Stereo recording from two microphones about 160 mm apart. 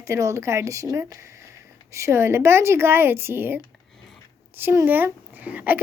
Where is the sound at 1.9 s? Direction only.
20° right (ahead or behind).